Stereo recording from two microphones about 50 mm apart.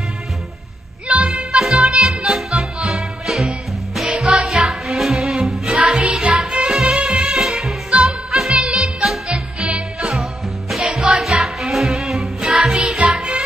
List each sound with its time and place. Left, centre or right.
1.0 s music: right
2.2 s music: centre
4.6 s music: centre
12.5 s music: centre